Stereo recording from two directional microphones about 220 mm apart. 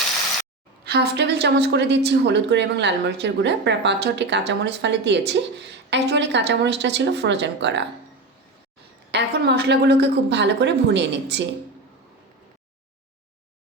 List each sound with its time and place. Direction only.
0.9 s a woman's voice: 50° right (ahead or behind)
9.1 s a woman's voice: 50° right (ahead or behind)